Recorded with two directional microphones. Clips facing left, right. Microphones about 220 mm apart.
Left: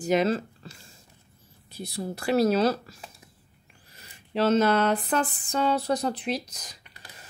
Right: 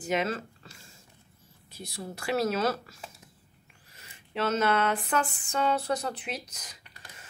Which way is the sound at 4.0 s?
35° left (ahead or behind).